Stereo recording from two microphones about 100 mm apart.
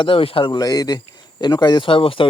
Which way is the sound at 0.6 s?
40° left (ahead or behind).